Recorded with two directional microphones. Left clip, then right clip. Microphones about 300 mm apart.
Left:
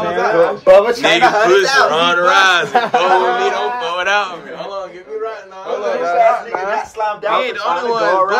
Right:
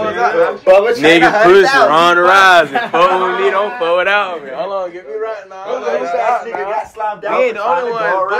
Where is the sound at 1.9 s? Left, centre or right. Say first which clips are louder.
Right 4 dB; centre.